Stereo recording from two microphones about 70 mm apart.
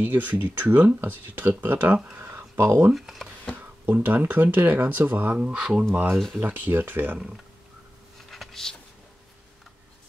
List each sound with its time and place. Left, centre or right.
0.0 s speech: right
2.1 s a sound: right
2.9 s speech: centre
3.8 s speech: right
5.4 s speech: centre
6.1 s speech: centre
6.4 s speech: right
8.3 s a sound: centre